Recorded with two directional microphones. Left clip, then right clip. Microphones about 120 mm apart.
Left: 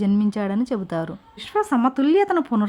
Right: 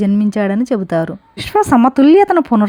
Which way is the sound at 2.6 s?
25° right (ahead or behind).